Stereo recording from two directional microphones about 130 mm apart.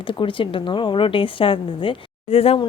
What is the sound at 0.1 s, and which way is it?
A woman's voice, 40° left (ahead or behind).